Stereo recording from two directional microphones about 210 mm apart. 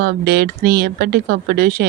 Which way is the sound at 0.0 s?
50° right (ahead or behind).